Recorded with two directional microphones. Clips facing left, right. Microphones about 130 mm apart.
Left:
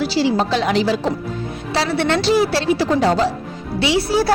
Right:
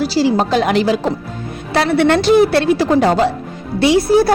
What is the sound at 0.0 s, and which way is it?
A woman's voice, 40° right (ahead or behind).